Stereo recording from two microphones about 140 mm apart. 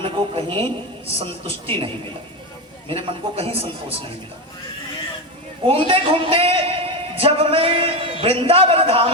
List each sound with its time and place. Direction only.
0.0 s a man's voice: 40° right (ahead or behind)
2.9 s a man's voice: 45° right (ahead or behind)
5.6 s a man's voice: 40° right (ahead or behind)